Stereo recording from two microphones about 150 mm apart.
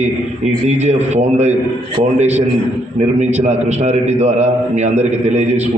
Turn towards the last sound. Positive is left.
turn(degrees=-45)  # may be behind; listen again after turning